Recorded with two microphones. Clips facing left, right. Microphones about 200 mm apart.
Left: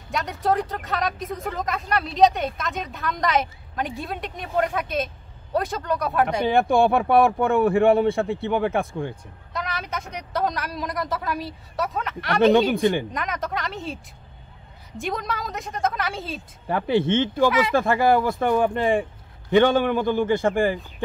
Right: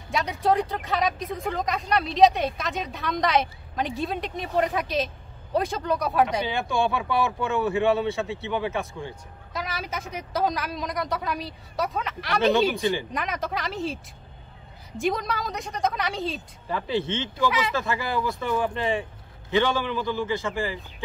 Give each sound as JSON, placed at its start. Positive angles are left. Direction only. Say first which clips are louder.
{"t": 0.1, "sound": "speech", "louder": "even", "side_deg": 0}
{"t": 6.4, "sound": "speech", "louder": "left 7 dB", "side_deg": 55}
{"t": 9.5, "sound": "speech", "louder": "left 2 dB", "side_deg": 0}
{"t": 12.5, "sound": "speech", "louder": "left 4 dB", "side_deg": 55}
{"t": 13.1, "sound": "speech", "louder": "left 1 dB", "side_deg": 0}
{"t": 15.0, "sound": "speech", "louder": "right 2 dB", "side_deg": 0}
{"t": 16.6, "sound": "speech", "louder": "left 6 dB", "side_deg": 55}